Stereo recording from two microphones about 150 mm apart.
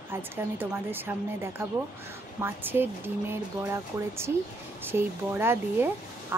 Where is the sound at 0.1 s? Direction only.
15° right (ahead or behind).